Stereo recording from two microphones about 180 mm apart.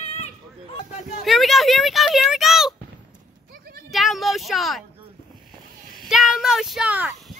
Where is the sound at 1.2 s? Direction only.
Centre (ahead or behind).